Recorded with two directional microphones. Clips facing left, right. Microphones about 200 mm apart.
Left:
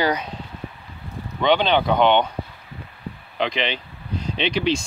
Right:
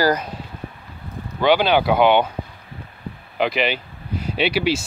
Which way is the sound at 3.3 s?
5° right (ahead or behind).